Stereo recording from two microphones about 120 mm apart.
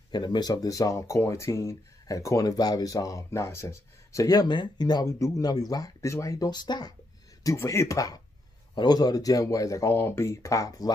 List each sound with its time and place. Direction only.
0.1 s speech: 35° left (ahead or behind)
7.4 s speech: 25° left (ahead or behind)